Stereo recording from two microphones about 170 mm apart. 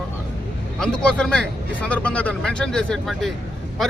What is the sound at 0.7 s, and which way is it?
Speech, 5° left (ahead or behind).